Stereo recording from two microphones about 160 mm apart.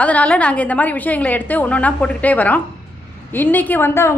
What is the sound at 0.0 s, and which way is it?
A woman's voice, 10° left (ahead or behind).